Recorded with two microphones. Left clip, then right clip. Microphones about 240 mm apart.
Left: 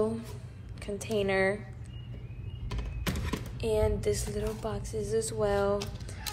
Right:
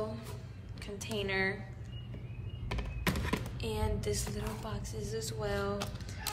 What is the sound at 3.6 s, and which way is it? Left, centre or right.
A woman's voice, centre.